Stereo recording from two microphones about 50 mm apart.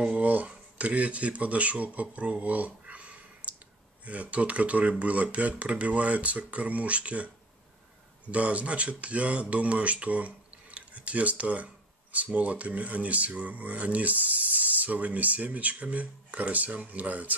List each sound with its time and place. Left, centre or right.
0.1 s speech: right
8.3 s speech: right